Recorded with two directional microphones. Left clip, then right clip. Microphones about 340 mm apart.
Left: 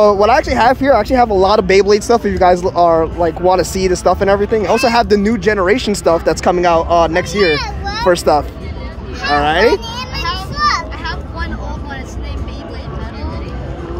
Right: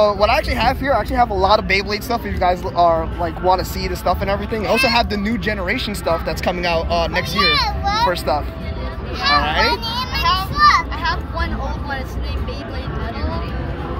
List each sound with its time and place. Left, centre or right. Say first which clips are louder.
0.0 s speech: left 5 dB; left
4.6 s speech: left 4 dB; centre
8.1 s speech: left 8 dB; left
9.2 s vehicle: left 4 dB; centre
10.5 s a sound: right 2 dB; centre